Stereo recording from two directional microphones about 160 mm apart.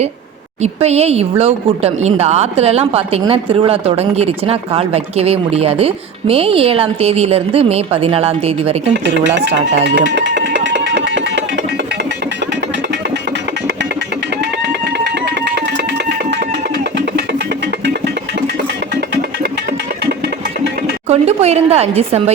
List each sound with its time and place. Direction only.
0.6 s speech: 40° right (ahead or behind)
8.9 s music: 90° right
14.6 s music: 90° right
18.9 s music: 90° right
21.1 s a woman's voice: 40° right (ahead or behind)